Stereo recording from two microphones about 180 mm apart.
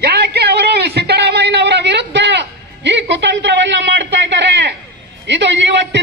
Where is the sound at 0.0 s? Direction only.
65° right (ahead or behind).